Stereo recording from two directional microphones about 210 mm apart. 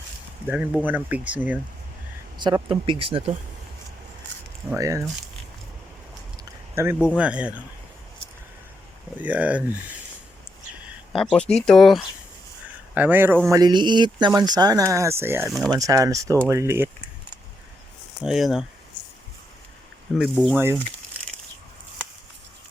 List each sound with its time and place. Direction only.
0.4 s speech: 5° right (ahead or behind)
2.4 s speech: 25° right (ahead or behind)
4.7 s speech: 15° right (ahead or behind)
6.3 s a sound: 10° right (ahead or behind)
7.2 s speech: 5° right (ahead or behind)
9.1 s speech: 5° right (ahead or behind)
11.1 s speech: centre (ahead or behind)
18.2 s speech: centre (ahead or behind)
20.3 s speech: 5° left (ahead or behind)